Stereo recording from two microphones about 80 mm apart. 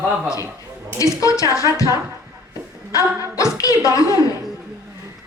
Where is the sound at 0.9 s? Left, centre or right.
Left.